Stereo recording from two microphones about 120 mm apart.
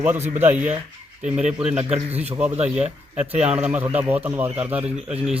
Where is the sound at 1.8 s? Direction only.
60° right (ahead or behind).